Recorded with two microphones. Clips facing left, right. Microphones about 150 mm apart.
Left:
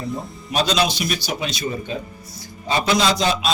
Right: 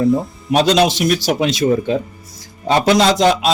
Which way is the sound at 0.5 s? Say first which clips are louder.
Right 7 dB; 75° right (ahead or behind).